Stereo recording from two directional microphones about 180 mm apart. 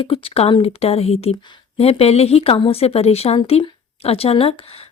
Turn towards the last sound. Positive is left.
turn(degrees=35)  # may be behind; listen again after turning